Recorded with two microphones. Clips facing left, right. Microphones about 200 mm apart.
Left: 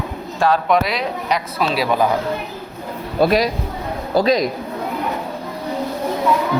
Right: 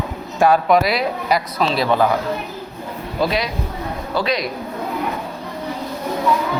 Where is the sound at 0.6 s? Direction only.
5° right (ahead or behind).